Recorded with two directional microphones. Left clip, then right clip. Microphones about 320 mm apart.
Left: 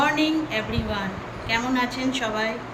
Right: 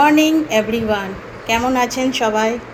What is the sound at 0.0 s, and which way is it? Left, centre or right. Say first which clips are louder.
Speech: right 9 dB; centre.